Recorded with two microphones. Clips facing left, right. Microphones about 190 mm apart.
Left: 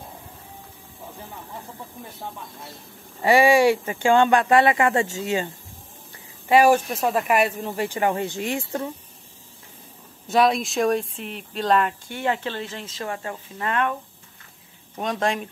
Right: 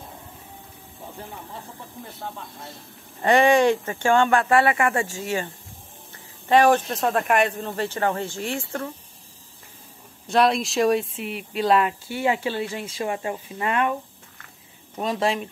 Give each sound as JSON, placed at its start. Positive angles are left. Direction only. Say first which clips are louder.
{"t": 3.2, "sound": "speech", "louder": "left 1 dB", "side_deg": 10}
{"t": 6.5, "sound": "speech", "louder": "left 1 dB", "side_deg": 10}
{"t": 10.2, "sound": "speech", "louder": "even", "side_deg": 0}
{"t": 15.0, "sound": "speech", "louder": "right 1 dB", "side_deg": -5}